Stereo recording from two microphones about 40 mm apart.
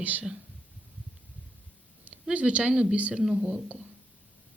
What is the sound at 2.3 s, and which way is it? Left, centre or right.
Speech, right.